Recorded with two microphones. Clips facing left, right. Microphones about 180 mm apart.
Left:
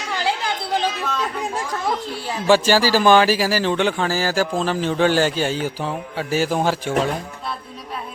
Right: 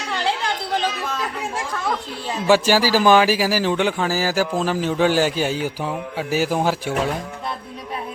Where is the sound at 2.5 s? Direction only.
10° right (ahead or behind).